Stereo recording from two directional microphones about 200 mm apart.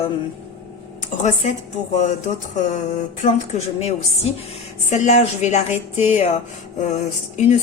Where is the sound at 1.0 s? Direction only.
35° left (ahead or behind).